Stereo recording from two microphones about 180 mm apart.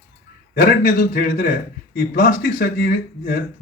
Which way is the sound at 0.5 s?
55° left (ahead or behind).